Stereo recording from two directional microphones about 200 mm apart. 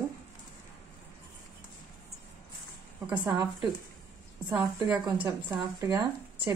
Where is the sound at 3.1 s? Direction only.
20° right (ahead or behind).